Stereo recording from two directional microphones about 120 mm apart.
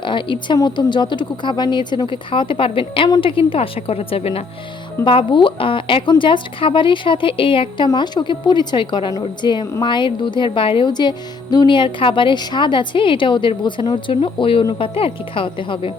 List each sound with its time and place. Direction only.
0.0 s a woman's voice: 40° left (ahead or behind)
5.0 s a woman's voice: 45° left (ahead or behind)
14.6 s speech: 35° left (ahead or behind)
14.9 s a woman's voice: 50° left (ahead or behind)